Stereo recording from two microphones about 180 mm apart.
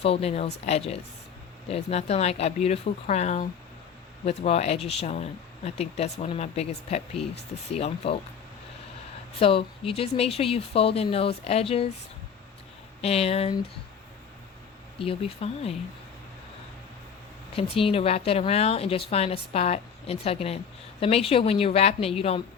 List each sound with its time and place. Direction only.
0.0 s a woman's voice: 35° left (ahead or behind)
4.4 s a woman's voice: 35° left (ahead or behind)
9.4 s a woman's voice: 30° left (ahead or behind)
13.0 s a woman's voice: 35° left (ahead or behind)
14.9 s a woman's voice: 30° left (ahead or behind)
17.6 s a woman's voice: 30° left (ahead or behind)